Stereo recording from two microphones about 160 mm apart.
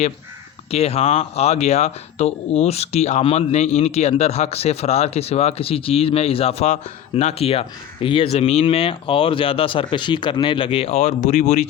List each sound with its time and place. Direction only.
0.7 s speech: 40° left (ahead or behind)